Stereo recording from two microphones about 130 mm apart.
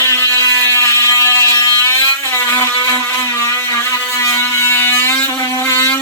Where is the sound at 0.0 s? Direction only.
20° left (ahead or behind).